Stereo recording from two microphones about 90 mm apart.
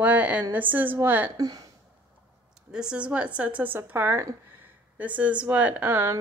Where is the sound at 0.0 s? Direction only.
15° right (ahead or behind).